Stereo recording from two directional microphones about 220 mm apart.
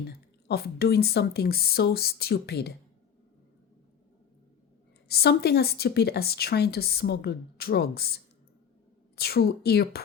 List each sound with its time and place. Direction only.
0.1 s a woman's voice: 45° left (ahead or behind)
5.0 s a woman's voice: 45° left (ahead or behind)